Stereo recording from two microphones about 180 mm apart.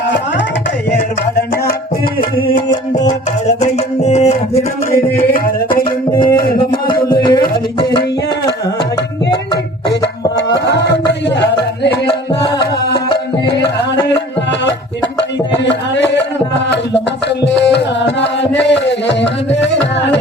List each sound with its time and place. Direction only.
2.5 s music: 45° left (ahead or behind)
6.1 s music: 25° left (ahead or behind)
10.7 s music: 70° left (ahead or behind)
12.0 s music: 25° left (ahead or behind)
13.5 s music: 75° left (ahead or behind)
17.4 s music: 75° left (ahead or behind)
18.6 s a sound: 75° left (ahead or behind)
19.5 s carnatic music: 80° left